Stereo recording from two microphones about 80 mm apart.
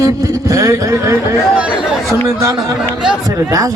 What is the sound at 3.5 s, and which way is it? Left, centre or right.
Speech, right.